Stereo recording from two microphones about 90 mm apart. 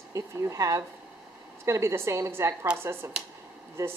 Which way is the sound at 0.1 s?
35° right (ahead or behind).